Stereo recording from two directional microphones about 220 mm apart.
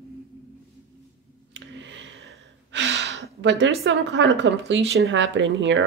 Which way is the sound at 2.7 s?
55° right (ahead or behind).